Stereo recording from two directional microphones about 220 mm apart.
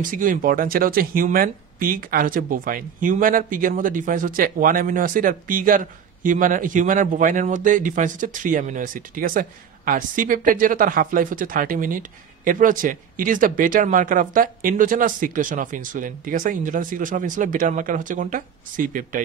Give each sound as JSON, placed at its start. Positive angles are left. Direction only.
{"t": 0.0, "sound": "speech", "side_deg": -35}